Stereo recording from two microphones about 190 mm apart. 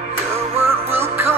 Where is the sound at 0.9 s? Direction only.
10° right (ahead or behind).